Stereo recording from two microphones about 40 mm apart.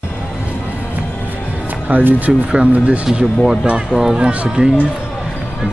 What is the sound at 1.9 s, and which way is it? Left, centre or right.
Speech, right.